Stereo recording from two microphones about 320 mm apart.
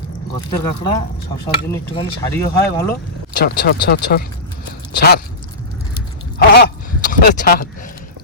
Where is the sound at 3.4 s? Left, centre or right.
Left.